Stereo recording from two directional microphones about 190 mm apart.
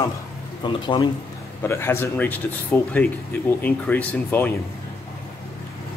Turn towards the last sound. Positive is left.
turn(degrees=10)  # may be behind; listen again after turning